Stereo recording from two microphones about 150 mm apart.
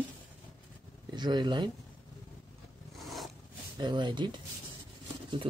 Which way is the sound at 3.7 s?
30° right (ahead or behind).